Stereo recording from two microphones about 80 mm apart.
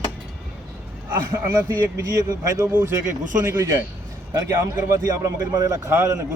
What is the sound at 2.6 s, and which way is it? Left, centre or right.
A man's voice, right.